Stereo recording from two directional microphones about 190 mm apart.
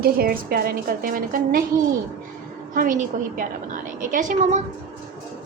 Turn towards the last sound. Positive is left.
turn(degrees=-40)  # may be behind; listen again after turning